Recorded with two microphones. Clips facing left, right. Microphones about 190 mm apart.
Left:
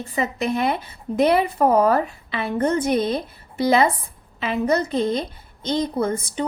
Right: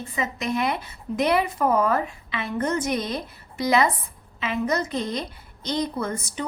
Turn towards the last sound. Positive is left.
turn(degrees=30)  # may be behind; listen again after turning